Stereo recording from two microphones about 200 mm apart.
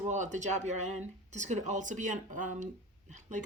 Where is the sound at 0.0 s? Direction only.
35° right (ahead or behind).